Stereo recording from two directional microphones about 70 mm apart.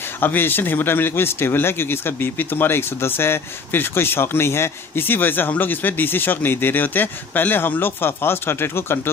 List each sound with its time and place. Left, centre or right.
0.2 s speech: left